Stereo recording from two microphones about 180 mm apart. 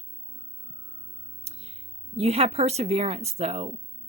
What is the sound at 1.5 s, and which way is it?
Music, 35° right (ahead or behind).